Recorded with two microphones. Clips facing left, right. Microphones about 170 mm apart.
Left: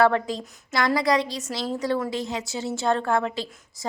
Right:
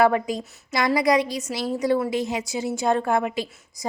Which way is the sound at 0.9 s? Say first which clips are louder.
Right 2 dB; 20° right (ahead or behind).